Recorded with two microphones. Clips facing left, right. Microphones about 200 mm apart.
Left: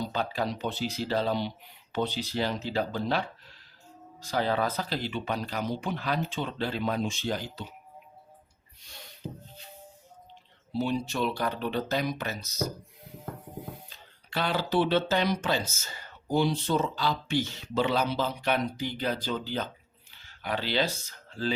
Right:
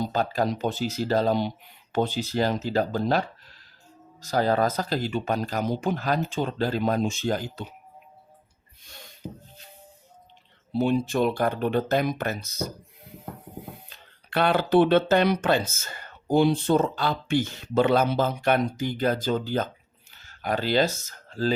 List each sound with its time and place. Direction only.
0.0 s speech: 45° right (ahead or behind)
10.7 s speech: 55° right (ahead or behind)
13.9 s speech: 60° right (ahead or behind); by 21.5 s 45° right (ahead or behind)